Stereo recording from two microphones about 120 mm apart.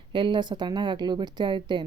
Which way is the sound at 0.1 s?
40° right (ahead or behind).